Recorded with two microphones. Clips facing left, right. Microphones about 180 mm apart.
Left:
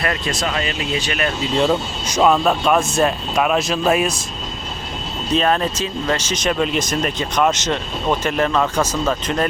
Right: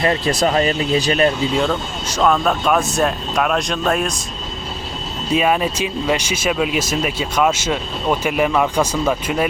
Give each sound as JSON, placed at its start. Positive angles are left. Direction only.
{"t": 0.0, "sound": "speech", "side_deg": -30}
{"t": 1.5, "sound": "speech", "side_deg": 5}
{"t": 5.3, "sound": "speech", "side_deg": -10}